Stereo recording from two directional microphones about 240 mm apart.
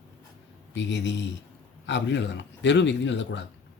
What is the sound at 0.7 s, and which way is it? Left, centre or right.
Speech, left.